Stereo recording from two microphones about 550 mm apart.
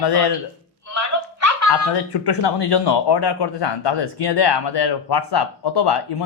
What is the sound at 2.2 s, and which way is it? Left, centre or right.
A man's voice, left.